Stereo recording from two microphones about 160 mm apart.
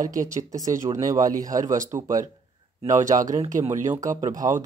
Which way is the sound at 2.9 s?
50° right (ahead or behind).